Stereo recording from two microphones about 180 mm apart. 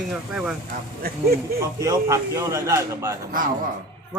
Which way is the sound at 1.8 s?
15° right (ahead or behind).